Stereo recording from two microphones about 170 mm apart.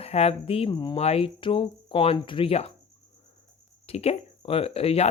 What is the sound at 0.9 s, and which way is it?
Speech, 35° left (ahead or behind).